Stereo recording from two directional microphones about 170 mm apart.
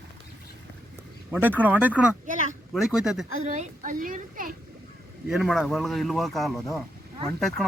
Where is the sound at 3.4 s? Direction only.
45° right (ahead or behind).